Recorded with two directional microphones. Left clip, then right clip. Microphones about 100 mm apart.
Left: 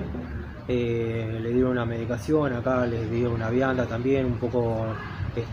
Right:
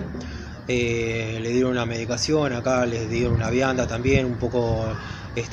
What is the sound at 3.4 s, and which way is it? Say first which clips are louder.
Speech: right 2 dB; 10° right (ahead or behind).